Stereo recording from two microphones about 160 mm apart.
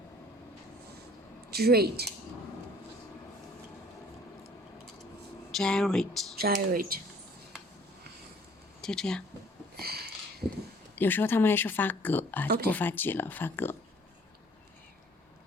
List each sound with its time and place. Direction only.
1.5 s speech: 75° right (ahead or behind)
5.5 s speech: 5° left (ahead or behind)
6.4 s speech: 70° right (ahead or behind)
8.8 s speech: 5° left (ahead or behind)
9.8 s a sound: 75° right (ahead or behind)
10.9 s speech: 10° left (ahead or behind)